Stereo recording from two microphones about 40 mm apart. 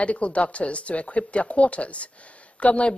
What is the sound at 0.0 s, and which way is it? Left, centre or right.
A woman's voice, left.